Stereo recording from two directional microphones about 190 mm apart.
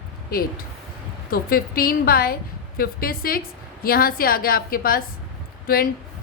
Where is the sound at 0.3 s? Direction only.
50° left (ahead or behind).